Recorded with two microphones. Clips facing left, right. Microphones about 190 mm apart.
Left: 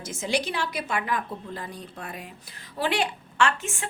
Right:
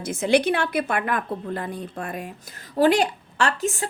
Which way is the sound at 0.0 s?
60° right (ahead or behind).